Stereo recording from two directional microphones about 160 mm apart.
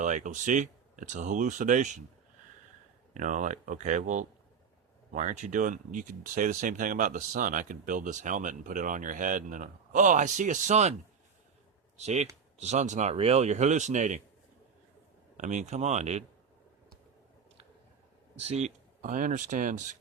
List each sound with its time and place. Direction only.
0.0 s speech: 50° right (ahead or behind)
3.2 s speech: 50° right (ahead or behind)
11.9 s speech: 45° right (ahead or behind)
15.4 s speech: 50° right (ahead or behind)
18.3 s speech: 40° right (ahead or behind)